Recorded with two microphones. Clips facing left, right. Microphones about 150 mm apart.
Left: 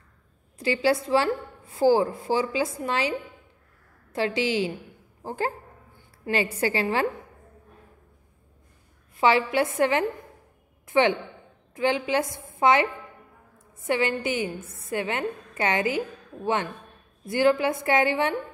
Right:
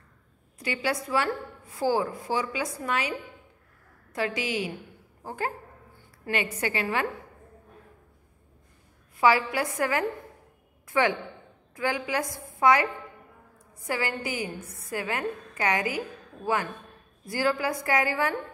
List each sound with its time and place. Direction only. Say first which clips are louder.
0.6 s a woman's voice: left 6 dB; 30° left (ahead or behind)
9.2 s a woman's voice: left 2 dB; 25° left (ahead or behind)
17.2 s a woman's voice: left 6 dB; 20° left (ahead or behind)